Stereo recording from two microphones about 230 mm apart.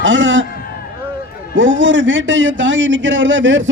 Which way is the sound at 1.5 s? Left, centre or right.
Right.